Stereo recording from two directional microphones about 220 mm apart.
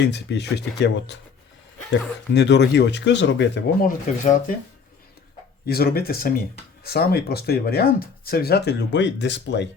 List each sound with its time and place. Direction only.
0.0 s speech: 50° left (ahead or behind)
3.8 s speech: 35° left (ahead or behind)
5.6 s speech: 45° left (ahead or behind)